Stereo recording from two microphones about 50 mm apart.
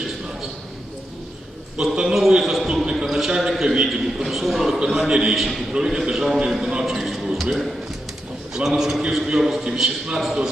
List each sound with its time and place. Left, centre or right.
1.8 s a man's voice: centre
2.4 s a sound: centre
3.5 s a man's voice: centre